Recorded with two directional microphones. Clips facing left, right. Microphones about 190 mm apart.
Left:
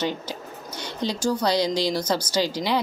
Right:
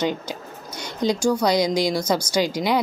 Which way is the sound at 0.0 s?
15° right (ahead or behind).